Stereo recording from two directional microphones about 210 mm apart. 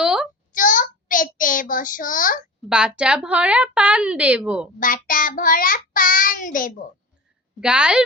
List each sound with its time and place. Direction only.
0.0 s a sound: 5° right (ahead or behind)
0.5 s child singing: 40° left (ahead or behind)
2.6 s a woman's voice: 5° right (ahead or behind)
4.8 s child singing: 40° left (ahead or behind)
7.6 s a woman's voice: 5° right (ahead or behind)